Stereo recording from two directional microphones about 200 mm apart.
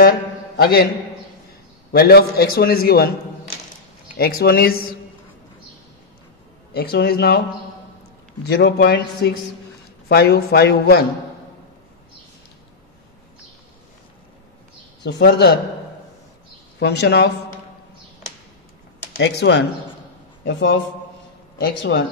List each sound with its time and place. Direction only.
0.6 s a man's voice: 50° left (ahead or behind)
1.9 s a man's voice: 50° left (ahead or behind)
4.1 s a man's voice: 50° left (ahead or behind)
6.7 s a man's voice: 55° left (ahead or behind)
8.5 s a man's voice: 55° left (ahead or behind)
15.0 s a man's voice: 60° left (ahead or behind)
16.8 s a man's voice: 55° left (ahead or behind)
19.1 s a man's voice: 65° left (ahead or behind)